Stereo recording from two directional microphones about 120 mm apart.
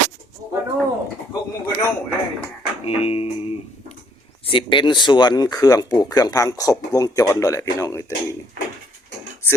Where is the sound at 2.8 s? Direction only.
60° left (ahead or behind).